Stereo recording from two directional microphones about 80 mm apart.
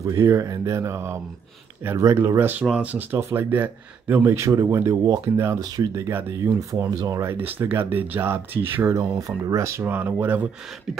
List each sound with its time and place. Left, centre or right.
0.0 s speech: right
2.6 s speech: centre
3.2 s speech: right
5.2 s speech: right
5.6 s speech: right
9.0 s speech: centre
9.4 s speech: right
9.8 s speech: right